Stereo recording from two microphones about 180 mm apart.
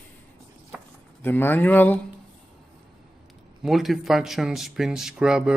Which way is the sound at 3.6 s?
Centre (ahead or behind).